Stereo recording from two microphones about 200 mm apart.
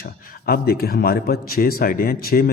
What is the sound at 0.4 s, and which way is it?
Speech, 50° left (ahead or behind).